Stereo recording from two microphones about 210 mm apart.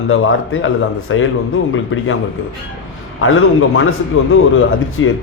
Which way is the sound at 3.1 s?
75° left (ahead or behind).